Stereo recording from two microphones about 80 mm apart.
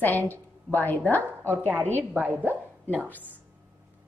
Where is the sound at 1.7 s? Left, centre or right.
Right.